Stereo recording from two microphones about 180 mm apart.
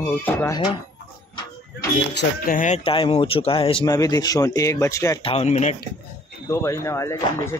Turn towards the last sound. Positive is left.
turn(degrees=15)  # may be behind; listen again after turning